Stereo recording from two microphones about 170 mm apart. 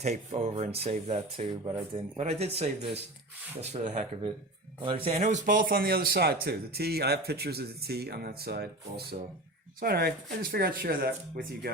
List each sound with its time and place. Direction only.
0.0 s speech: 40° right (ahead or behind)
1.6 s speech: 25° right (ahead or behind)
2.1 s speech: 40° right (ahead or behind)
5.1 s speech: 45° right (ahead or behind); by 11.7 s 60° right (ahead or behind)